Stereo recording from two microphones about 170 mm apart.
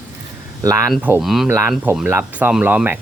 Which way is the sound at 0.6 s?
20° right (ahead or behind).